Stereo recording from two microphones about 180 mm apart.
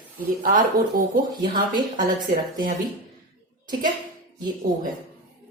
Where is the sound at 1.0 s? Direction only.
55° right (ahead or behind).